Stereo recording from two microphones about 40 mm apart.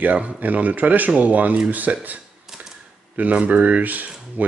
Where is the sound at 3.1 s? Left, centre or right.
Right.